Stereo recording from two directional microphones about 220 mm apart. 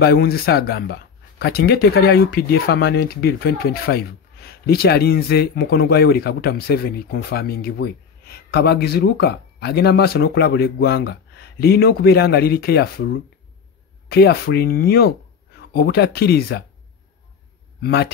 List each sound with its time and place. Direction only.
0.0 s speech: 45° left (ahead or behind)
17.8 s speech: 50° left (ahead or behind)